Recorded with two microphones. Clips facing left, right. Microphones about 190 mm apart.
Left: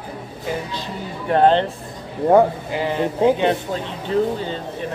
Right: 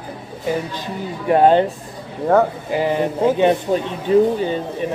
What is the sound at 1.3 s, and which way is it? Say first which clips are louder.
Speech: right 2 dB; 10° right (ahead or behind).